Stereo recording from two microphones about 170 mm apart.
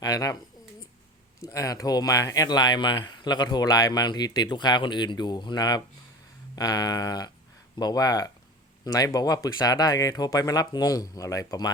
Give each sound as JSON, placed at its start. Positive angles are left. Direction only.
{"t": 0.0, "sound": "bird", "side_deg": 20}
{"t": 1.4, "sound": "speech", "side_deg": 20}